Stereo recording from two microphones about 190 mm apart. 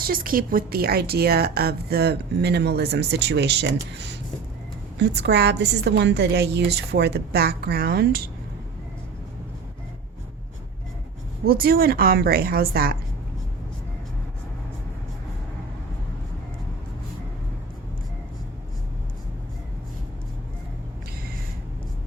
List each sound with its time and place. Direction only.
0.0 s speech: 50° right (ahead or behind)
11.4 s a woman's voice: 50° right (ahead or behind)